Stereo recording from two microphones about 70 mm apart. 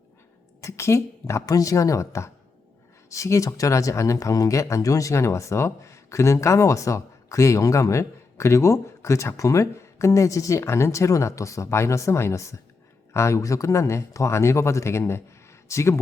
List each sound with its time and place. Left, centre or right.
0.6 s a woman's voice: left